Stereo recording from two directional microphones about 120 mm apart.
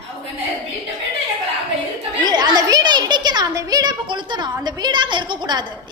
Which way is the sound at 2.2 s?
35° right (ahead or behind).